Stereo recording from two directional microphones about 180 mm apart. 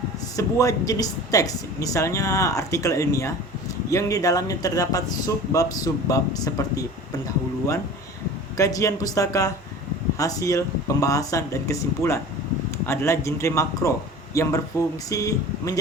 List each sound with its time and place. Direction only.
0.3 s speech: 20° left (ahead or behind)
8.5 s speech: 15° left (ahead or behind)